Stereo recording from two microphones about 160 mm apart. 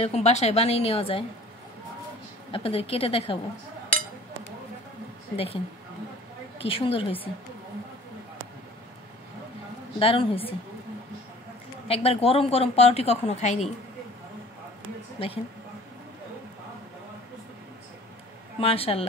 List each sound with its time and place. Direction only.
0.0 s a woman's voice: 40° left (ahead or behind)
2.5 s a woman's voice: 35° left (ahead or behind)
5.3 s a woman's voice: 35° left (ahead or behind)
6.6 s a woman's voice: 35° left (ahead or behind)
9.9 s a woman's voice: 35° left (ahead or behind)
11.9 s a woman's voice: 40° left (ahead or behind)
15.1 s a woman's voice: 35° left (ahead or behind)
18.6 s a woman's voice: 35° left (ahead or behind)